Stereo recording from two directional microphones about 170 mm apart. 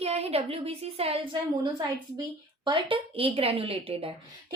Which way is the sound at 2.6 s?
30° right (ahead or behind).